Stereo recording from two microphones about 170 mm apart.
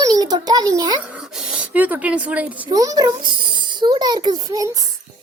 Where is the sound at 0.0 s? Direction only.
25° right (ahead or behind).